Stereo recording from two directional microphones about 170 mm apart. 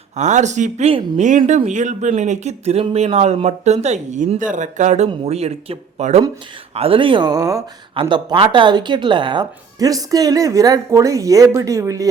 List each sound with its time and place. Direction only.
0.2 s a woman's voice: 45° right (ahead or behind); by 12.0 s 20° right (ahead or behind)